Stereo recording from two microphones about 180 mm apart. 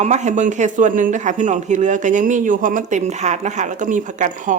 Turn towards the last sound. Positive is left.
turn(degrees=-45)  # may be behind; listen again after turning